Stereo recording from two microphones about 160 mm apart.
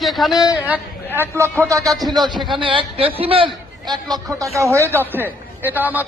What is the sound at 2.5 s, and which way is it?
A man's voice, 30° right (ahead or behind).